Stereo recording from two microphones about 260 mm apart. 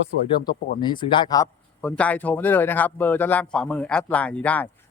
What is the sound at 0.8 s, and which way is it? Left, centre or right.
Speech, centre.